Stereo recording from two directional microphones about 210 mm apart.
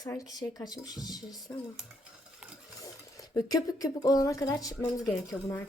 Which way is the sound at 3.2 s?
15° left (ahead or behind).